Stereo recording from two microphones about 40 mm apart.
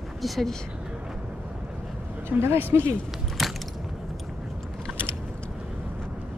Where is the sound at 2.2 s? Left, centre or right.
Right.